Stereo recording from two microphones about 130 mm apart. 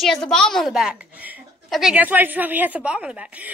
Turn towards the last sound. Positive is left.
turn(degrees=-10)  # may be behind; listen again after turning